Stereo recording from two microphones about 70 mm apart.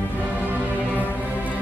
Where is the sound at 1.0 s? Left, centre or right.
Left.